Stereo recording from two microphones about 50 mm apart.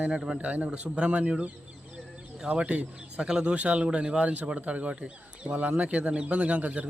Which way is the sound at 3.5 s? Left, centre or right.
Right.